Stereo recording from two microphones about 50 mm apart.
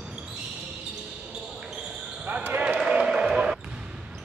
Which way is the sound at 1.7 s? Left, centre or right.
Centre.